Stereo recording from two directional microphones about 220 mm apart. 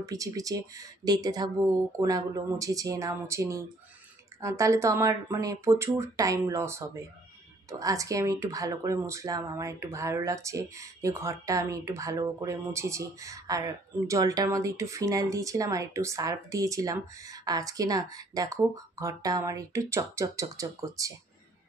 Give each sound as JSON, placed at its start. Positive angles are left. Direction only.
{"t": 0.0, "sound": "speech", "side_deg": -15}